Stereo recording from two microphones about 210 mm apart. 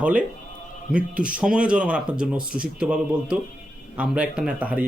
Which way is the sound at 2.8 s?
5° right (ahead or behind).